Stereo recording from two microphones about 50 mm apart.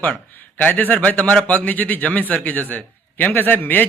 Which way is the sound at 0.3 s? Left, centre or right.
Left.